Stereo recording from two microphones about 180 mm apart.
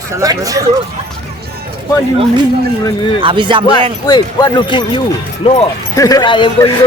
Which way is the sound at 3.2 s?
30° right (ahead or behind).